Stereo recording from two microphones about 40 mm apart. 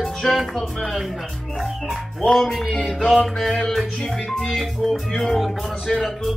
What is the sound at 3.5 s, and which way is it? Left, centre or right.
Music, centre.